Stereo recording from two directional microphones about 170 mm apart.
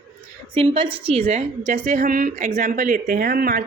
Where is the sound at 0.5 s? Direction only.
30° right (ahead or behind).